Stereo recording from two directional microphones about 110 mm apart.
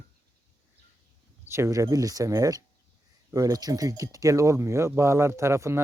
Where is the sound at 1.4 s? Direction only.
25° right (ahead or behind).